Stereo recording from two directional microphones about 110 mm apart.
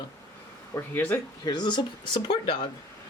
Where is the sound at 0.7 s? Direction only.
15° left (ahead or behind).